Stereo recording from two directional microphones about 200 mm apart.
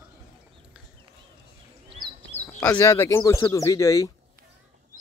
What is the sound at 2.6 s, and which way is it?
Speech, 10° left (ahead or behind).